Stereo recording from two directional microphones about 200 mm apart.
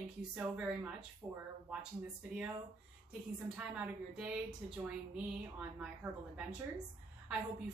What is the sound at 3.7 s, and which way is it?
A woman's voice, 5° right (ahead or behind).